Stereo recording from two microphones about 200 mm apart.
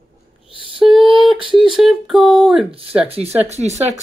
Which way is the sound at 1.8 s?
Centre (ahead or behind).